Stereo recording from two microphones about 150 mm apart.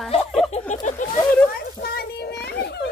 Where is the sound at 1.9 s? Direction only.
90° left.